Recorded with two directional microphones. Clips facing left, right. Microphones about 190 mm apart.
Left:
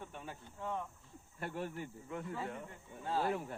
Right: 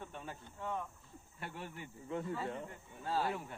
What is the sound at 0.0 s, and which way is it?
Cricket, 10° left (ahead or behind).